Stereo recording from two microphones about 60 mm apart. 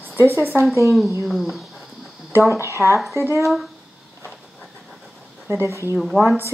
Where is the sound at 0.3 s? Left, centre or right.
Right.